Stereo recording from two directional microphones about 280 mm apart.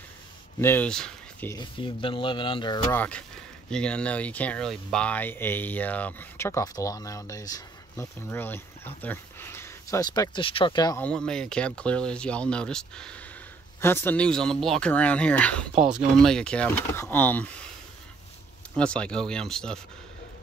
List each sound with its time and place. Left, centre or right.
0.6 s speech: centre
18.8 s speech: centre